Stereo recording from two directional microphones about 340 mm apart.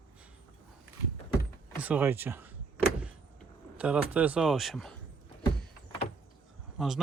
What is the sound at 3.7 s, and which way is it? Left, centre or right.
Speech, centre.